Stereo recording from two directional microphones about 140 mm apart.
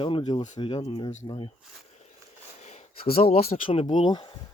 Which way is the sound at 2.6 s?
55° left (ahead or behind).